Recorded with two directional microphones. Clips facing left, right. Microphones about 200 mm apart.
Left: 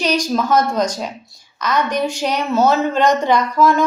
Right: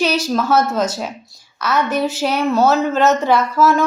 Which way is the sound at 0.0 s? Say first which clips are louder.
Even; 5° right (ahead or behind).